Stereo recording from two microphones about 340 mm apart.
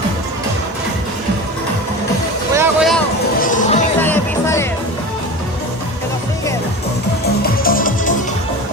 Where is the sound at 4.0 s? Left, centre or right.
Centre.